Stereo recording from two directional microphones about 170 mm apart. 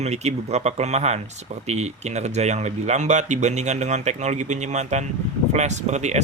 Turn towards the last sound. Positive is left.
turn(degrees=-40)  # may be behind; listen again after turning